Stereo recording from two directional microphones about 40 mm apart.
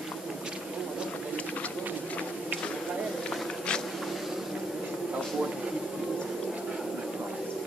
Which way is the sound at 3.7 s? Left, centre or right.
Left.